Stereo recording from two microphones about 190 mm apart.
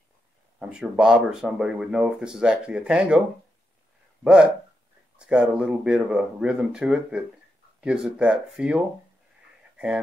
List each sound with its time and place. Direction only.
0.6 s speech: 5° right (ahead or behind)
4.2 s speech: 5° right (ahead or behind)